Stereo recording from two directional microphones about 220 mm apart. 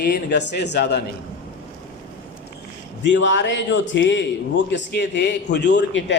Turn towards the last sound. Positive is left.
turn(degrees=55)  # may be behind; listen again after turning